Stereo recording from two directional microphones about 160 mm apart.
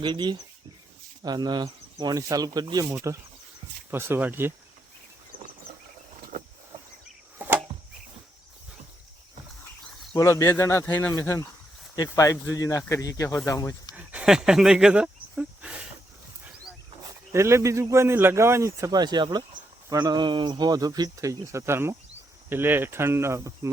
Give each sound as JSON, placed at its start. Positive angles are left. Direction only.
{"t": 0.0, "sound": "a man's voice", "side_deg": -25}
{"t": 7.3, "sound": "chop", "side_deg": -10}
{"t": 10.2, "sound": "speech", "side_deg": 20}
{"t": 13.9, "sound": "snake", "side_deg": -10}
{"t": 17.3, "sound": "a man's voice", "side_deg": -15}